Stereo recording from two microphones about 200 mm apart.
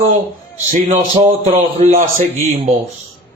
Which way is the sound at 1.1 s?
30° right (ahead or behind).